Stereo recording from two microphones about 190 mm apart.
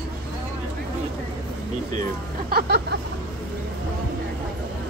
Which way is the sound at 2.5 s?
55° right (ahead or behind).